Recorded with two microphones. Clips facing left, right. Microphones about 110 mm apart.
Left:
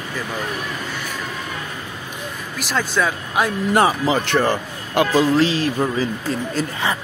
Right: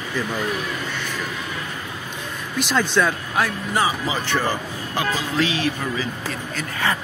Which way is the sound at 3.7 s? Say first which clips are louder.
Left 6 dB; 60° left (ahead or behind).